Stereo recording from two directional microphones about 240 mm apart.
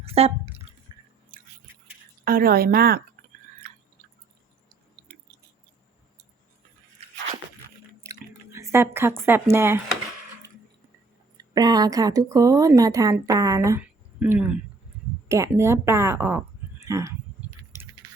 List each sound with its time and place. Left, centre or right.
0.0 s speech: right
0.9 s drip: centre
1.3 s a sound: right
2.2 s speech: right
8.5 s speech: centre
11.3 s speech: centre
17.4 s a sound: centre